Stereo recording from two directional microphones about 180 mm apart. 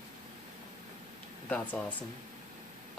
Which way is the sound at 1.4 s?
10° left (ahead or behind).